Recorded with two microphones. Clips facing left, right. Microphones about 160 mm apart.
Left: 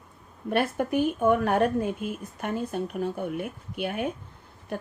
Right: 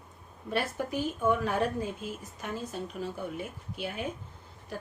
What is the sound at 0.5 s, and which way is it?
Speech, 60° left (ahead or behind).